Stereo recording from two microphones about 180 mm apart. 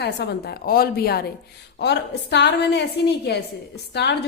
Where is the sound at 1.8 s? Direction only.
70° left (ahead or behind).